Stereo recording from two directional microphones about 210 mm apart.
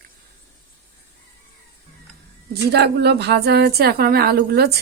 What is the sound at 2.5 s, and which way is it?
A woman's voice, 50° right (ahead or behind).